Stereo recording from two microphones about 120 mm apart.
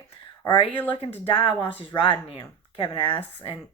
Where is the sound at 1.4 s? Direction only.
45° left (ahead or behind).